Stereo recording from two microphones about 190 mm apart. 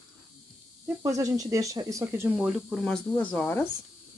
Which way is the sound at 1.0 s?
20° right (ahead or behind).